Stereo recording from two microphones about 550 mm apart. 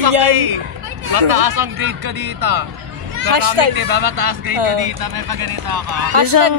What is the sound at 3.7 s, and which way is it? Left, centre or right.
Speech, right.